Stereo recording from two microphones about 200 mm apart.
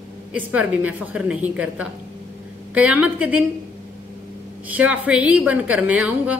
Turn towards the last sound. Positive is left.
turn(degrees=-5)  # may be behind; listen again after turning